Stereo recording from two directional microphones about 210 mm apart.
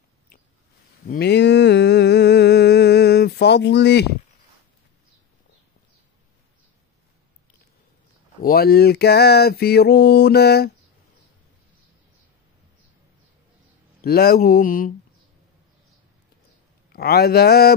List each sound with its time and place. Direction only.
1.0 s a sound: 45° left (ahead or behind)
8.4 s mantra: 45° left (ahead or behind)
14.0 s mantra: 45° left (ahead or behind)
16.9 s mantra: 50° left (ahead or behind)